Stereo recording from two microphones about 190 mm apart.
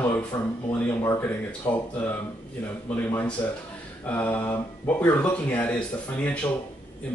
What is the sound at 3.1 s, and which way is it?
Speech, 10° left (ahead or behind).